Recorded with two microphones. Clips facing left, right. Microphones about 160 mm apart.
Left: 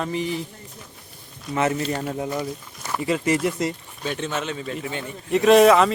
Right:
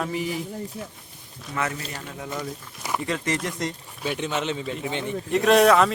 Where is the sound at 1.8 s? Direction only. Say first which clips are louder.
Left 10 dB; 40° left (ahead or behind).